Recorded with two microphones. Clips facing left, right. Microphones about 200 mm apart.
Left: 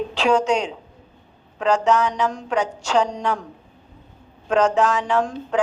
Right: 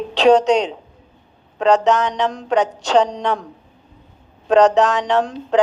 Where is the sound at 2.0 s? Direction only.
35° right (ahead or behind).